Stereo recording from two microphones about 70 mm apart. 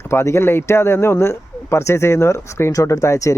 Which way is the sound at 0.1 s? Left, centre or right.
Left.